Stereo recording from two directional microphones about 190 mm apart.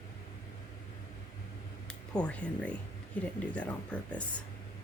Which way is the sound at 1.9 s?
5° left (ahead or behind).